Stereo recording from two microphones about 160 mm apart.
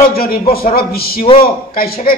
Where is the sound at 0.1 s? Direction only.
70° left (ahead or behind).